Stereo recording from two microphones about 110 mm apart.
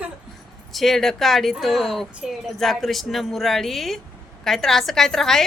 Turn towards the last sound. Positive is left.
turn(degrees=5)  # may be behind; listen again after turning